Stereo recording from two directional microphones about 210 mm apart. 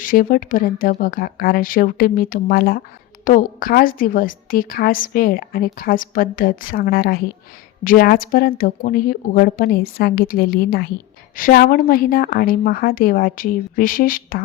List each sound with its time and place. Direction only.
0.0 s a woman's voice: 40° left (ahead or behind)